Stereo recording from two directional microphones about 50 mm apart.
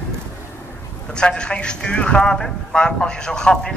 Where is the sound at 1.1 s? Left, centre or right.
Centre.